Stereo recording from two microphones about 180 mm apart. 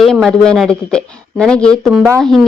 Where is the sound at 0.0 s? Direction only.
Centre (ahead or behind).